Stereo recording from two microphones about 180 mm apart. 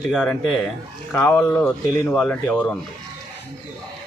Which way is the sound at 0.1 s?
Centre (ahead or behind).